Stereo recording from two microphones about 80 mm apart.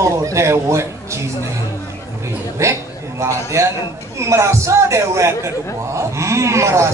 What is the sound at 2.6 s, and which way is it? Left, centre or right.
A man's voice, right.